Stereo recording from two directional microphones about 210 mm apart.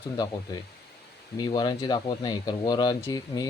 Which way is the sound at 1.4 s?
20° left (ahead or behind).